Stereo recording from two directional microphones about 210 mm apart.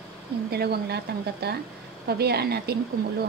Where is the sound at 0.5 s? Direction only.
50° right (ahead or behind).